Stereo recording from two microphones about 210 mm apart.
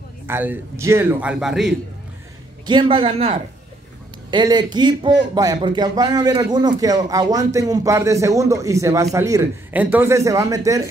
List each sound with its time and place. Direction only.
0.3 s speech: 10° right (ahead or behind)
2.6 s speech: 20° right (ahead or behind)